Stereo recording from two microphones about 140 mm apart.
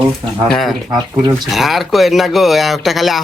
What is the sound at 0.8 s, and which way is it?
Speech, 20° right (ahead or behind).